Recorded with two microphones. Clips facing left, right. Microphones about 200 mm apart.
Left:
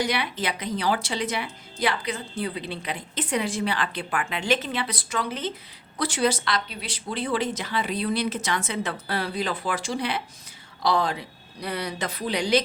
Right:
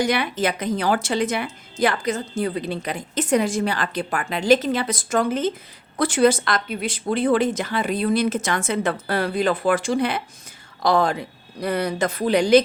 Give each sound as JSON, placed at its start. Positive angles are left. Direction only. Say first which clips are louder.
{"t": 0.0, "sound": "a woman's voice", "louder": "right 6 dB", "side_deg": -50}